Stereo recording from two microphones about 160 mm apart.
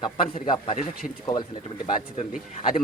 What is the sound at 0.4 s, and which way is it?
Speech, 30° left (ahead or behind).